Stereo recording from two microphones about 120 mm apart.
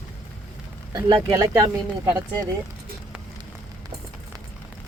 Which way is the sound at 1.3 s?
25° right (ahead or behind).